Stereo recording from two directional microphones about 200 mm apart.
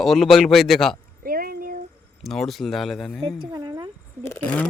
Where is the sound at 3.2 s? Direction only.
25° right (ahead or behind).